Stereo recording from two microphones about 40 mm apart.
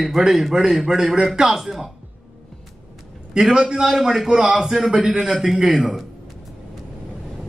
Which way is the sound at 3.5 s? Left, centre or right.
Centre.